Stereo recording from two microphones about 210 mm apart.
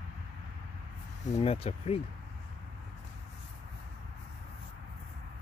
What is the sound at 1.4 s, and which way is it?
Speech, 30° left (ahead or behind).